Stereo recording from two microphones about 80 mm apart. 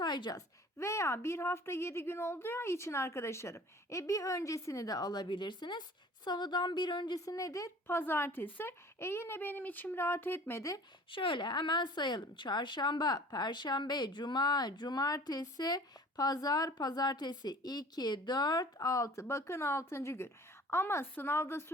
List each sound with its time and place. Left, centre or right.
0.0 s speech: left
0.3 s a woman's voice: left
7.3 s a woman's voice: left
7.9 s a woman's voice: left
11.1 s a woman's voice: left